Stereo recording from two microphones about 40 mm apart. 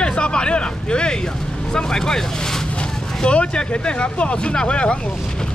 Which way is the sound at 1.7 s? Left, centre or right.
Centre.